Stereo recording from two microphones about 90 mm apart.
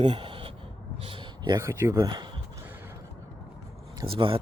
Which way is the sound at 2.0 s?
55° right (ahead or behind).